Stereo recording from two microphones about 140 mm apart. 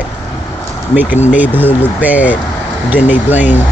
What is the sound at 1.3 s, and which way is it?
Speech, 10° right (ahead or behind).